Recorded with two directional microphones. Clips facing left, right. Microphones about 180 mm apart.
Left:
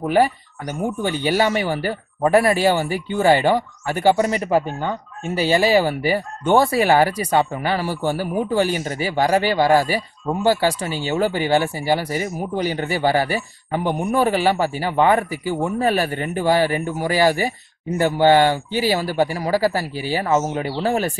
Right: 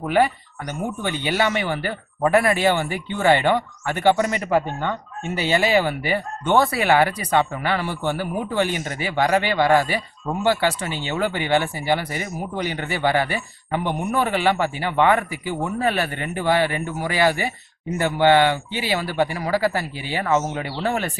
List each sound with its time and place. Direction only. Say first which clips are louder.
0.1 s speech: left 1 dB; 35° left (ahead or behind)